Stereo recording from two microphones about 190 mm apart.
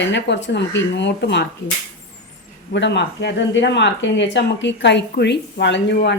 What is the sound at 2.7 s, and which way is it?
Speech, 70° left (ahead or behind).